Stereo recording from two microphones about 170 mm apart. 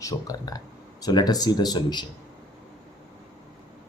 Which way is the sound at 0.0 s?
20° left (ahead or behind).